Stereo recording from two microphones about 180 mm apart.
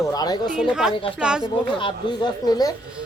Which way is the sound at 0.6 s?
5° right (ahead or behind).